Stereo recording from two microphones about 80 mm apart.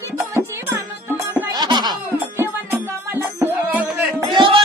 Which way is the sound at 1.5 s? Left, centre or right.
Right.